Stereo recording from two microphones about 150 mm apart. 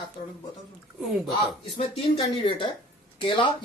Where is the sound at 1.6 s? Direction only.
40° left (ahead or behind).